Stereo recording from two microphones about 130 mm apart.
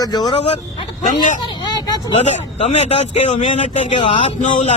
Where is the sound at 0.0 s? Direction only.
35° left (ahead or behind).